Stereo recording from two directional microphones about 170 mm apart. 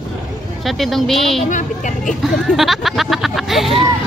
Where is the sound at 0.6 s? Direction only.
Centre (ahead or behind).